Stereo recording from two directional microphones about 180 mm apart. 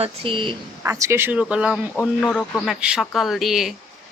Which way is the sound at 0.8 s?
15° right (ahead or behind).